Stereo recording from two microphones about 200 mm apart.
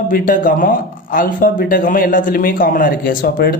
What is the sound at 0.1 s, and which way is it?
Speech, 45° left (ahead or behind).